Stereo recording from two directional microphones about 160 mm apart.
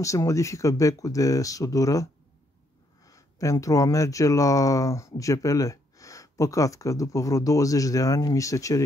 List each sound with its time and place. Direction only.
0.0 s speech: 20° left (ahead or behind)
3.1 s speech: 20° left (ahead or behind)